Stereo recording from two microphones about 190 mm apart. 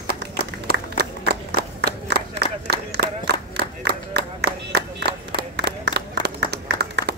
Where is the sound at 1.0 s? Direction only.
55° right (ahead or behind).